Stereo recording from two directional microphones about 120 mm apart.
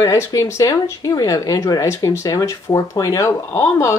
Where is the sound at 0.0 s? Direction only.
30° left (ahead or behind).